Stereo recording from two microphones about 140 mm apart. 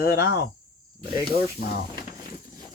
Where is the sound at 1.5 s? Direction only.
90° left.